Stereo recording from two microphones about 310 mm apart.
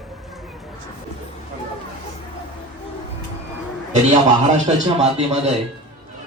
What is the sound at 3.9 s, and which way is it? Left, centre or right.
A man's voice, right.